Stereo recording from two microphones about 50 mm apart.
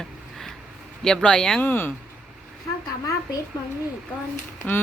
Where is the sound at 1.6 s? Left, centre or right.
Left.